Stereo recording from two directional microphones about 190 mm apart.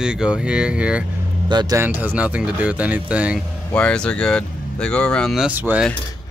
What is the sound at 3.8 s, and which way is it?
Speech, 5° left (ahead or behind).